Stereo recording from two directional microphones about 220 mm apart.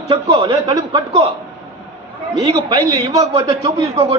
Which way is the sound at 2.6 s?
15° right (ahead or behind).